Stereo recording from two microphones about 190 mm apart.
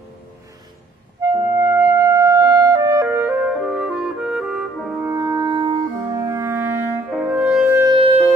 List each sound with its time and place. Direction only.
1.3 s music: 15° right (ahead or behind)
3.1 s music: 5° right (ahead or behind)
5.1 s music: 20° right (ahead or behind)
7.1 s french horn: 5° right (ahead or behind)
7.7 s music: 20° right (ahead or behind)